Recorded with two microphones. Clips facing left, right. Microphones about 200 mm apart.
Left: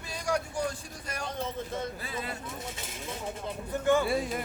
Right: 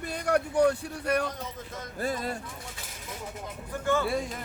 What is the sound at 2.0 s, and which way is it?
Speech, 45° right (ahead or behind).